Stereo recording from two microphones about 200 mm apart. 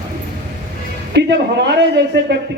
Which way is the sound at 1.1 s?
55° right (ahead or behind).